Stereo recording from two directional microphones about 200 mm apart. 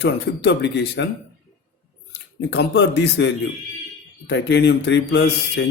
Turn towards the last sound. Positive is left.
turn(degrees=55)  # may be behind; listen again after turning